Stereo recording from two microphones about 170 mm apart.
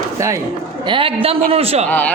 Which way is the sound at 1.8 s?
10° left (ahead or behind).